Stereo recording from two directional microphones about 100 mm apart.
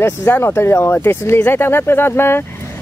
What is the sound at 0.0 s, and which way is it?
Speech, 25° left (ahead or behind).